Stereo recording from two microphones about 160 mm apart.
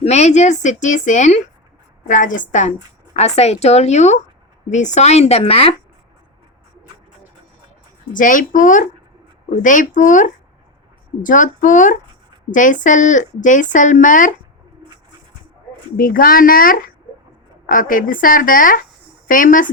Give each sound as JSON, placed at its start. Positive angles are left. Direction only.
{"t": 0.0, "sound": "speech", "side_deg": 45}
{"t": 8.1, "sound": "speech", "side_deg": 55}
{"t": 16.0, "sound": "a woman's voice", "side_deg": 60}